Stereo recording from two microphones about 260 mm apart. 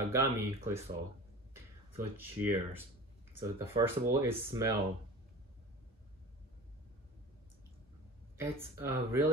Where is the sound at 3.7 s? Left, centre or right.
Centre.